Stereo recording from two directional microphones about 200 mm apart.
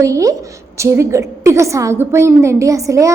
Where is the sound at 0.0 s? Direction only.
15° right (ahead or behind).